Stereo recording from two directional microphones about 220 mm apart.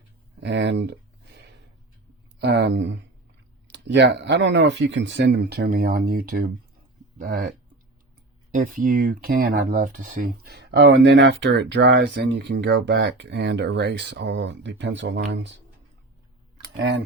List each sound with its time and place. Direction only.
0.3 s a sound: 50° right (ahead or behind)
2.4 s speech: 50° right (ahead or behind)
8.5 s speech: 35° right (ahead or behind)
10.6 s speech: 50° right (ahead or behind)
16.7 s speech: 55° right (ahead or behind)